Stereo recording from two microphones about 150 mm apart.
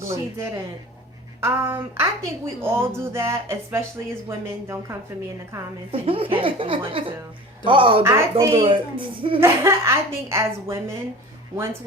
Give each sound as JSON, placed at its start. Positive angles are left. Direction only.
{"t": 0.0, "sound": "speech", "side_deg": -20}
{"t": 5.9, "sound": "a woman's voice", "side_deg": -40}
{"t": 8.0, "sound": "speech", "side_deg": -20}
{"t": 8.5, "sound": "a woman's voice", "side_deg": -35}
{"t": 9.4, "sound": "speech", "side_deg": -20}